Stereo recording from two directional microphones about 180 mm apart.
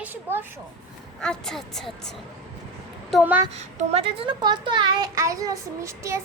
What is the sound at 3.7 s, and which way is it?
A child's voice, 35° right (ahead or behind).